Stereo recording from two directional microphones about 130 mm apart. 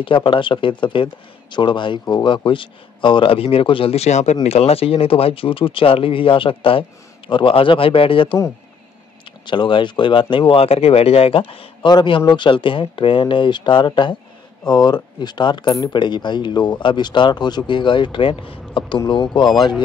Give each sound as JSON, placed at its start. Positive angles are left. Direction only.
{"t": 0.0, "sound": "speech", "side_deg": 40}
{"t": 9.5, "sound": "speech", "side_deg": 40}